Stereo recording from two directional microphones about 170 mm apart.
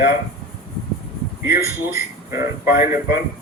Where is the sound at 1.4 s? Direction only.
15° right (ahead or behind).